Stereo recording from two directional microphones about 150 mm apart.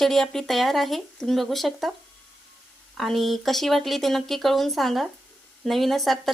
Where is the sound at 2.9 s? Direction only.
Centre (ahead or behind).